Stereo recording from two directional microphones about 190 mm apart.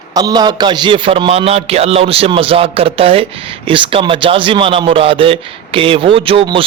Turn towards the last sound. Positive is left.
turn(degrees=-30)  # may be behind; listen again after turning